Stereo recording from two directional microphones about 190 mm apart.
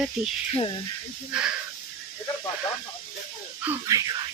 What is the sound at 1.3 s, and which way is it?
Speech, 5° right (ahead or behind).